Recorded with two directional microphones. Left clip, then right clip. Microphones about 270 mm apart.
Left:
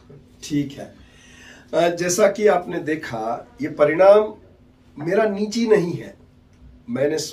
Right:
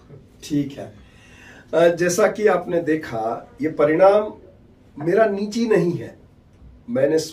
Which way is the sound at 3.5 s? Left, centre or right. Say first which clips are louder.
Left 1 dB; centre.